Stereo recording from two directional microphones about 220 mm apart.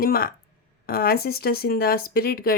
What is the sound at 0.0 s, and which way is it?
Speech, 40° left (ahead or behind).